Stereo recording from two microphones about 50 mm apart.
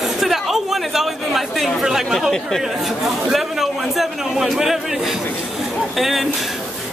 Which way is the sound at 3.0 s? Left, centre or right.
Centre.